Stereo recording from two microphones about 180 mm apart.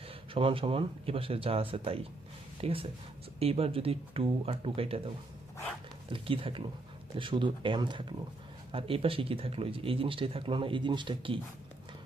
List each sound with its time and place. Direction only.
0.1 s speech: 30° right (ahead or behind)